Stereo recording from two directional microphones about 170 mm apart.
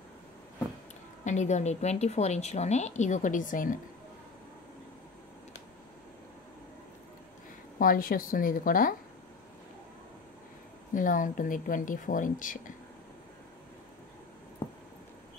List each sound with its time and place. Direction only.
1.2 s a woman's voice: 45° left (ahead or behind)
7.8 s a woman's voice: 55° left (ahead or behind)
11.0 s speech: 50° left (ahead or behind)